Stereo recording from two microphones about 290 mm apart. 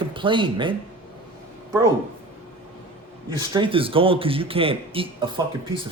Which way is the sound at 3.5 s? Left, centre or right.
Centre.